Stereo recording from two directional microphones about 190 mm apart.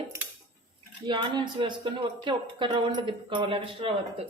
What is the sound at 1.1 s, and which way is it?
Speech, 25° right (ahead or behind).